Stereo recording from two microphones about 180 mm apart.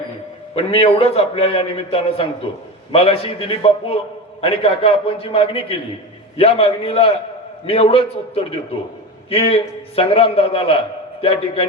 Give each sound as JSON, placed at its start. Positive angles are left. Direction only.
{"t": 0.5, "sound": "a man's voice", "side_deg": 35}